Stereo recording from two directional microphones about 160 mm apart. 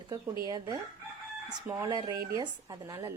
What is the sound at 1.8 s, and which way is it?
A woman's voice, 20° right (ahead or behind).